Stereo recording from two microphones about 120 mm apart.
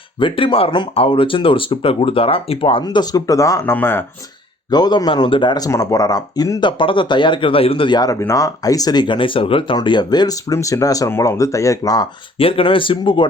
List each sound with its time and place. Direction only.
0.2 s speech: 45° left (ahead or behind)
2.8 s speech: 35° left (ahead or behind); by 4.0 s 20° left (ahead or behind)
4.7 s speech: 35° left (ahead or behind)
12.4 s speech: 50° left (ahead or behind)